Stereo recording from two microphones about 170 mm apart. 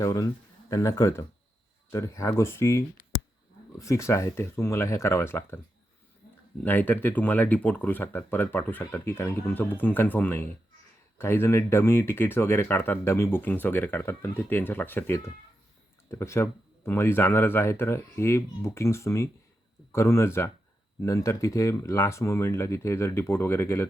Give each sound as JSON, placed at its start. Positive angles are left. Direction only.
{"t": 0.0, "sound": "speech", "side_deg": 20}
{"t": 6.7, "sound": "speech", "side_deg": 10}